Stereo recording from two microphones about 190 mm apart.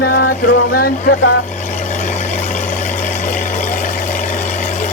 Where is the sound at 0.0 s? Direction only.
55° left (ahead or behind).